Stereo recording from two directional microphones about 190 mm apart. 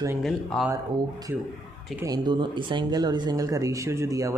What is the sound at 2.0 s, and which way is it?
Speech, 20° right (ahead or behind).